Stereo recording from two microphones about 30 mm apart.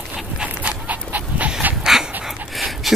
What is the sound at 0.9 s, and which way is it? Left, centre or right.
Dog, right.